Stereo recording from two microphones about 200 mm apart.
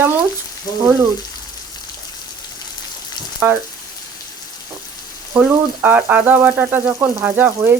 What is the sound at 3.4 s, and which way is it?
Frying, 10° right (ahead or behind).